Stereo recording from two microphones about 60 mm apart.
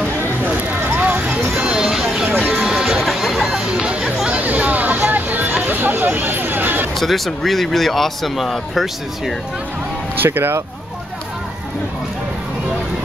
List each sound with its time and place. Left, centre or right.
0.5 s a sound: right
1.7 s a sound: centre
2.2 s music: right
2.5 s music: centre
3.8 s chatter: centre
4.9 s hubbub: right
7.0 s speech: centre
10.1 s speech: right